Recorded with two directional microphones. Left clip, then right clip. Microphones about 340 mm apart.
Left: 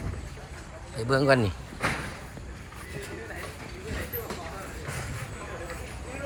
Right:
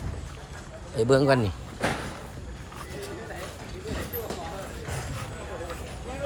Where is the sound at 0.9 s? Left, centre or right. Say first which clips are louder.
Right 2 dB; centre.